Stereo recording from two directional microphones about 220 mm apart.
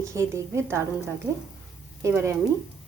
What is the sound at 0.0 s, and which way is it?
A woman's voice, 15° right (ahead or behind).